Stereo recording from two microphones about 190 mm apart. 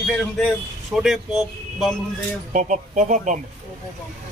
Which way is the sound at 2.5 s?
40° right (ahead or behind).